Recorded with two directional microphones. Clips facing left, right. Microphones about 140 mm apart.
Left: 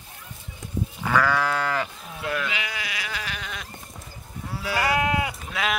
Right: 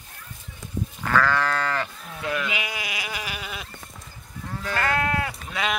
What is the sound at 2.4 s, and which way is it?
Sheep, 15° right (ahead or behind).